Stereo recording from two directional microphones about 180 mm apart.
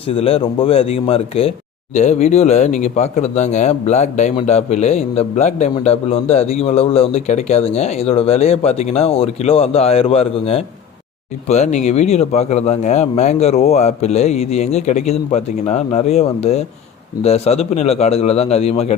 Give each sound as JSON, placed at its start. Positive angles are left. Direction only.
{"t": 0.1, "sound": "speech", "side_deg": 30}